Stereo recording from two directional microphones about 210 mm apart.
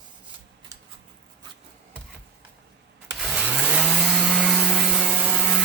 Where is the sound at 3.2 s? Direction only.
5° right (ahead or behind).